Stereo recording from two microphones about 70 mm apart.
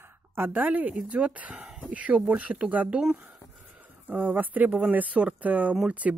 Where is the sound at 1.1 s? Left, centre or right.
Centre.